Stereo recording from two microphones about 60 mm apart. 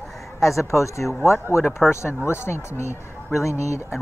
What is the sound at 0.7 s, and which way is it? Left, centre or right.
Speech, left.